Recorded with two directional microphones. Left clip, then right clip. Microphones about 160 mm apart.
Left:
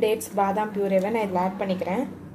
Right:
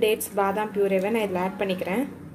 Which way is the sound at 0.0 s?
15° right (ahead or behind).